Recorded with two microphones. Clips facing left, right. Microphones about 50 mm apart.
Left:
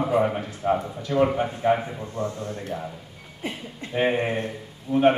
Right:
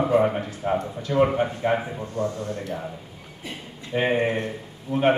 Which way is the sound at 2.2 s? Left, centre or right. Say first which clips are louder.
Right 2 dB; left.